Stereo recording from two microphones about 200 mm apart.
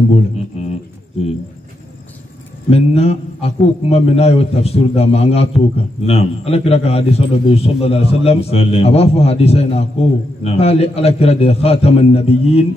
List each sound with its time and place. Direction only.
2.7 s a man's voice: 30° left (ahead or behind)